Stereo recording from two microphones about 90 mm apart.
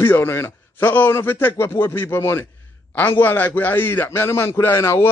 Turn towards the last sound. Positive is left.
turn(degrees=30)  # may be behind; listen again after turning